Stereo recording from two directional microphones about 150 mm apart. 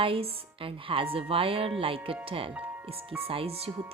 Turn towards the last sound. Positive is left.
turn(degrees=-40)  # may be behind; listen again after turning